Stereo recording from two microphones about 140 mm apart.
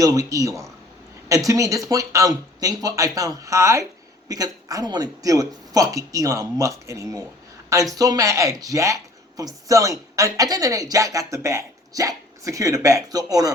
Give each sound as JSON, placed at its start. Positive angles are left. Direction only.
{"t": 0.0, "sound": "a woman's voice", "side_deg": -25}